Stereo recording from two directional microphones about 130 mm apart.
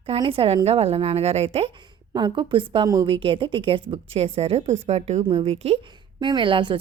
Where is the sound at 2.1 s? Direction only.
35° right (ahead or behind).